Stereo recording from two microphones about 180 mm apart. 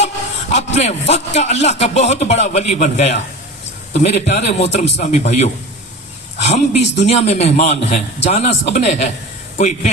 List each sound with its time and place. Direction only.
0.5 s speech: 40° left (ahead or behind)